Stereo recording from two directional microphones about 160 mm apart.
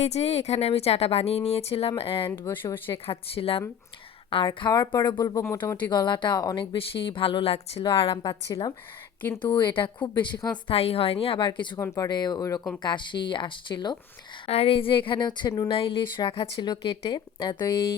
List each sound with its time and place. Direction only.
0.0 s speech: 40° left (ahead or behind)
2.4 s speech: 15° left (ahead or behind)
2.9 s speech: 35° left (ahead or behind)